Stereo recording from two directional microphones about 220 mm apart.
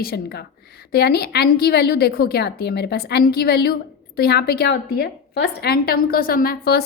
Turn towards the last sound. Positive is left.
turn(degrees=45)  # may be behind; listen again after turning